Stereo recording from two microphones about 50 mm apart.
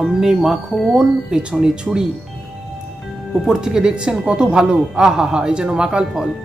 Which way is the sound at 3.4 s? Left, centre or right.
Centre.